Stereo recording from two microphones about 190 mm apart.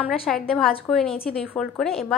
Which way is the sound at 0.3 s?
Centre (ahead or behind).